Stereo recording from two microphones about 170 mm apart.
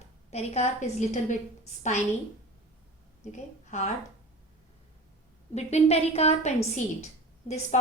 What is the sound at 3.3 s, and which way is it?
Speech, 45° left (ahead or behind).